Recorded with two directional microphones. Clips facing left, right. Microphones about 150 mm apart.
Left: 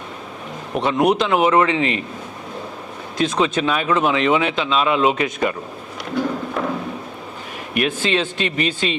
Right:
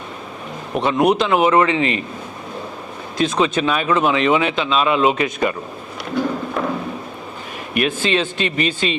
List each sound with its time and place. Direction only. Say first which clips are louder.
0.7 s speech: right 1 dB; 10° right (ahead or behind)
3.2 s speech: right 1 dB; 10° right (ahead or behind)
6.1 s a sound: right 1 dB; 20° right (ahead or behind)
7.7 s speech: right 1 dB; 10° right (ahead or behind)